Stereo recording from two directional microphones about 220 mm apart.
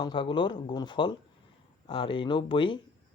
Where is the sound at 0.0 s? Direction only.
20° left (ahead or behind).